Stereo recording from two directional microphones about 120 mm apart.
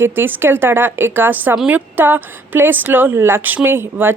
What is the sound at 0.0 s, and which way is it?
A woman's voice, 15° right (ahead or behind).